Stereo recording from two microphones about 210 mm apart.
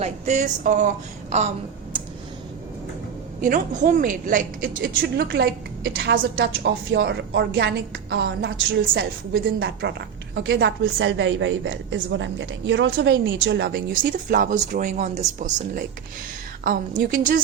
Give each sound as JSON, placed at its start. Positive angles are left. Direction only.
{"t": 0.0, "sound": "a woman's voice", "side_deg": -35}
{"t": 3.4, "sound": "a woman's voice", "side_deg": -35}